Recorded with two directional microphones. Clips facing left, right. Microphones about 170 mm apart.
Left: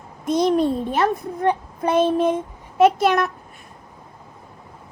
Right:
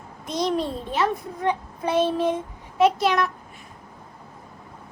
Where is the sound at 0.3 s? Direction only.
50° left (ahead or behind).